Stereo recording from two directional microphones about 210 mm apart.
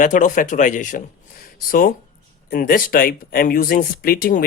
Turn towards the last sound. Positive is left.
turn(degrees=45)  # may be behind; listen again after turning